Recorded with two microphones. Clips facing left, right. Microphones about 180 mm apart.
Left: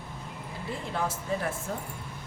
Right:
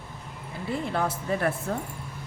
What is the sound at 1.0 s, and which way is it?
Speech, 60° right (ahead or behind).